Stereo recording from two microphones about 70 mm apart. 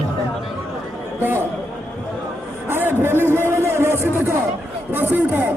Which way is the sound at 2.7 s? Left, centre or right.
Right.